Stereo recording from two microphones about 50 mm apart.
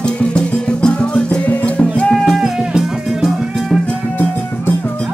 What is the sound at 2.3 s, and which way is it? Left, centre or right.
Music, centre.